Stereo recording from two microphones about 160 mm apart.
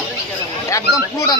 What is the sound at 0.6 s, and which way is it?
Speech, 20° left (ahead or behind).